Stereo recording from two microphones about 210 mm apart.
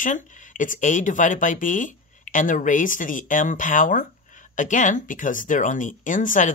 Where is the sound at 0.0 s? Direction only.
35° left (ahead or behind).